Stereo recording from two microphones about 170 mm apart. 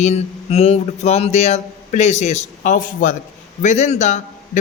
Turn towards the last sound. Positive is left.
turn(degrees=45)  # may be behind; listen again after turning